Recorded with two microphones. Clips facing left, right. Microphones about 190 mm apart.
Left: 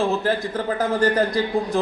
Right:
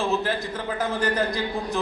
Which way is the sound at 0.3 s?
45° left (ahead or behind).